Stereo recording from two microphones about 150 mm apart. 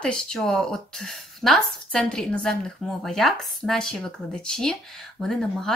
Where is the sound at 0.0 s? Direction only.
5° left (ahead or behind).